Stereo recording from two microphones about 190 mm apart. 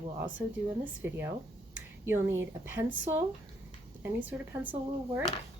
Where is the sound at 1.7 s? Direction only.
10° right (ahead or behind).